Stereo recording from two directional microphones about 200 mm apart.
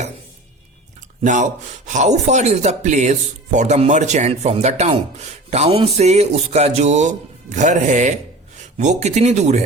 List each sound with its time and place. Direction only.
1.2 s speech: 40° right (ahead or behind)